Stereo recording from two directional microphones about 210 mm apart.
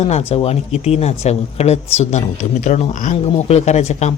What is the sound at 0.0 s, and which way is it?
Speech, 30° left (ahead or behind).